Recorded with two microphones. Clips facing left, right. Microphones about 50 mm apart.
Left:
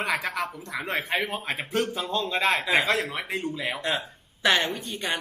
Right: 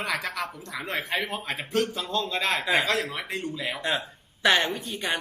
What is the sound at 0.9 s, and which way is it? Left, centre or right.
A man's voice, centre.